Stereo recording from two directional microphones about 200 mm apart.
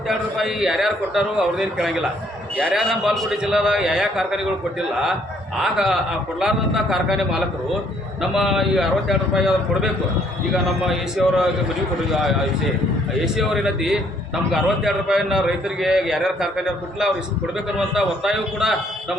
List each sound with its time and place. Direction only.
0.1 s a man's voice: centre (ahead or behind)
5.6 s a man's voice: centre (ahead or behind)
11.2 s a man's voice: centre (ahead or behind)
13.2 s a man's voice: centre (ahead or behind)